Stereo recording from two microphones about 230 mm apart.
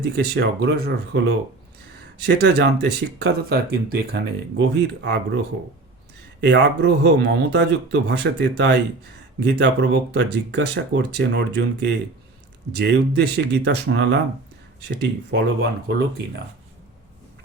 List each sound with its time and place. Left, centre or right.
0.0 s speech: right
6.4 s speech: right